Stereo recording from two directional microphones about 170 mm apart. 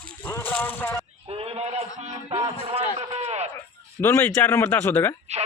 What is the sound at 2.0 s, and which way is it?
Music, 40° right (ahead or behind).